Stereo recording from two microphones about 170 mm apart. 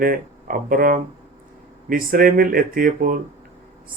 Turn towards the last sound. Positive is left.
turn(degrees=-55)  # may be behind; listen again after turning